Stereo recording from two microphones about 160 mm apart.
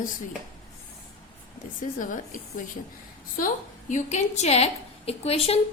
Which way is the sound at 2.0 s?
55° left (ahead or behind).